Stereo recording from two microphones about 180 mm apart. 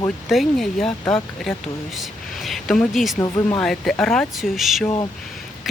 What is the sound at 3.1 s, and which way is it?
Speech, 20° left (ahead or behind).